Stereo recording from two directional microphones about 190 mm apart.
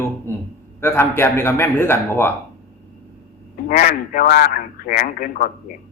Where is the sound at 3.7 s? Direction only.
45° left (ahead or behind).